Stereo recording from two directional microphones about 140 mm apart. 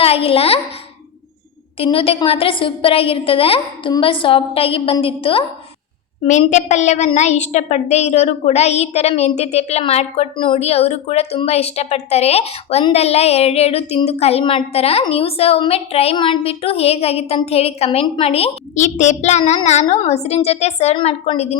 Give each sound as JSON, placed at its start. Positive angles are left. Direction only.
{"t": 0.0, "sound": "a woman's voice", "side_deg": 45}
{"t": 1.8, "sound": "a woman's voice", "side_deg": 40}
{"t": 6.4, "sound": "a woman's voice", "side_deg": 55}